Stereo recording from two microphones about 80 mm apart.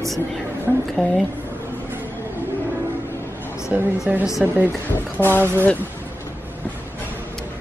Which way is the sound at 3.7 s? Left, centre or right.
Centre.